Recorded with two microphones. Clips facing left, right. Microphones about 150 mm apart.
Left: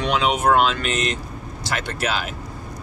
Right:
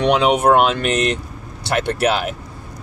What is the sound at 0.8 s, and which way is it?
Speech, 65° right (ahead or behind).